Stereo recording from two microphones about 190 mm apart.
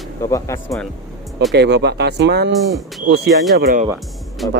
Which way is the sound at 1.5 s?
60° right (ahead or behind).